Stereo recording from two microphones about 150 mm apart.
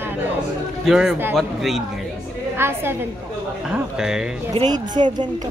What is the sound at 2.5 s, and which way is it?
Speech, 15° right (ahead or behind).